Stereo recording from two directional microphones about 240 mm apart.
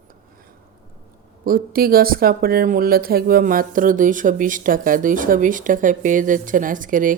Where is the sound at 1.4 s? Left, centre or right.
Right.